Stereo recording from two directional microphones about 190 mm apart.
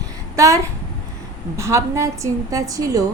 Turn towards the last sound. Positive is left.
turn(degrees=-20)  # may be behind; listen again after turning